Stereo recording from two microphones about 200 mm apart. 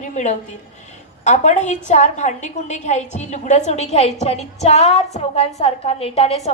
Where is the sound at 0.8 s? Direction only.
35° left (ahead or behind).